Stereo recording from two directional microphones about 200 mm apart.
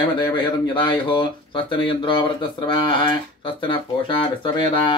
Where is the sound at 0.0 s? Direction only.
20° left (ahead or behind).